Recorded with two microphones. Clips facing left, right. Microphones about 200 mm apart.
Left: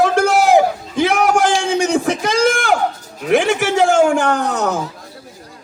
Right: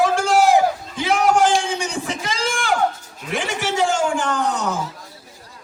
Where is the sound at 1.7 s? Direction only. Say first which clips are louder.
Left 9 dB; 80° left.